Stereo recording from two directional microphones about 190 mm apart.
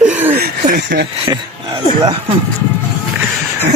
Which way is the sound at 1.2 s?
25° right (ahead or behind).